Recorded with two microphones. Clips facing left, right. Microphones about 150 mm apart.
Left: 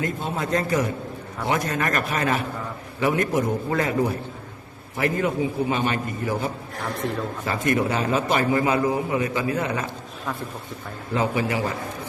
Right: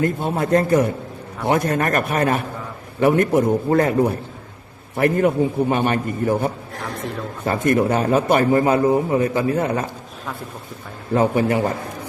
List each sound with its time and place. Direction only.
0.0 s a man's voice: 55° right (ahead or behind)
11.1 s a man's voice: 50° right (ahead or behind)